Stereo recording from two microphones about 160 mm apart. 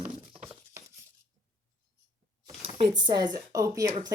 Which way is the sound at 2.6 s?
30° right (ahead or behind).